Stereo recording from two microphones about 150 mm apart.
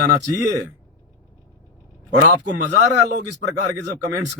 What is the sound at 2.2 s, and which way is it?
Speech, 55° right (ahead or behind).